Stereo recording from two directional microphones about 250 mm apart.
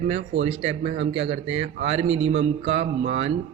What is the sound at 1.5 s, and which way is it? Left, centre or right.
Speech, right.